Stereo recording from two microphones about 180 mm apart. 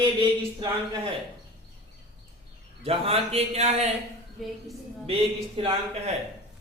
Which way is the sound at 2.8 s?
35° right (ahead or behind).